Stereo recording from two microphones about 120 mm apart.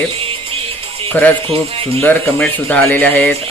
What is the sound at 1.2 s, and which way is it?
Speech, 15° left (ahead or behind).